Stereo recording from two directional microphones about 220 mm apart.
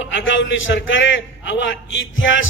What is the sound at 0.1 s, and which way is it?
A man's voice, 60° left (ahead or behind).